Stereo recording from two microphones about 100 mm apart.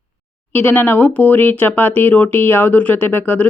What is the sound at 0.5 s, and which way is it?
Speech, 20° left (ahead or behind).